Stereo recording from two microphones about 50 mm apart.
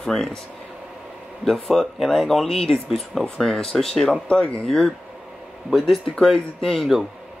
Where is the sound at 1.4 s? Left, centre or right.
Centre.